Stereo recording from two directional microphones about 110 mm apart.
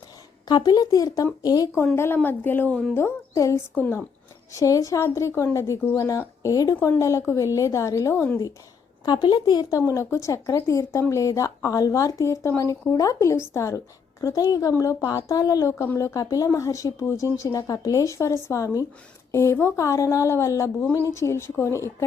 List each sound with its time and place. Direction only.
0.4 s speech: 40° left (ahead or behind)
2.2 s a woman's voice: 20° left (ahead or behind)
4.5 s a woman's voice: 30° left (ahead or behind)
8.1 s speech: 15° left (ahead or behind)
9.0 s a woman's voice: 40° left (ahead or behind)
15.8 s a woman's voice: 25° left (ahead or behind)